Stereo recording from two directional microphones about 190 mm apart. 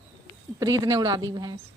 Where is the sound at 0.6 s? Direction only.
20° right (ahead or behind).